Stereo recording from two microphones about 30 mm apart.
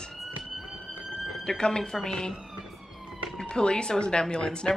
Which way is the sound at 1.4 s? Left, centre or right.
Left.